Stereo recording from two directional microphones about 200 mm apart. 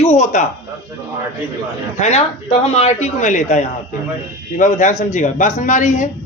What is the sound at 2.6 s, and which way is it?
A woman's voice, 35° left (ahead or behind).